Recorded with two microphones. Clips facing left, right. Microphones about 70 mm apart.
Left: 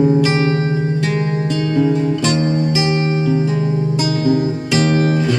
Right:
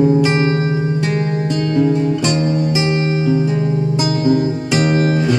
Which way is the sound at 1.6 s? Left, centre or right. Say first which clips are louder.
Right 1 dB; centre.